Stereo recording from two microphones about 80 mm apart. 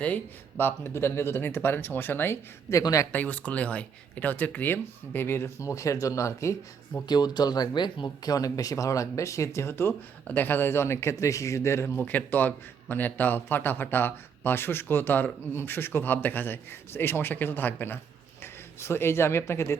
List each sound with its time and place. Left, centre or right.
0.0 s a man's voice: left
3.1 s a man's voice: left
5.5 s speech: left
7.1 s speech: left
8.0 s speech: left
10.2 s speech: left
11.9 s a man's voice: left